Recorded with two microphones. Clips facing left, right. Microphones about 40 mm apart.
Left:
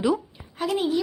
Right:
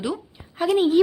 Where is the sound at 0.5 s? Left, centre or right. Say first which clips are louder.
Right 5 dB; centre.